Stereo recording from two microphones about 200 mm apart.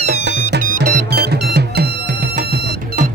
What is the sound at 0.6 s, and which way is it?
Music, 45° right (ahead or behind).